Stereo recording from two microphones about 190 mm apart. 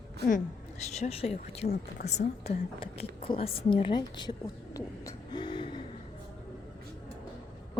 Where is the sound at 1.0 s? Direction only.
30° left (ahead or behind).